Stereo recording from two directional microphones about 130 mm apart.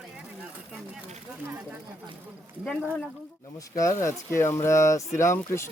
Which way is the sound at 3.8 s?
20° left (ahead or behind).